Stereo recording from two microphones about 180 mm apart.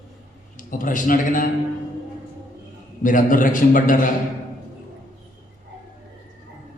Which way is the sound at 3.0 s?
45° left (ahead or behind).